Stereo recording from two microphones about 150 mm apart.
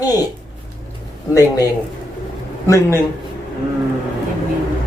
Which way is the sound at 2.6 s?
20° left (ahead or behind).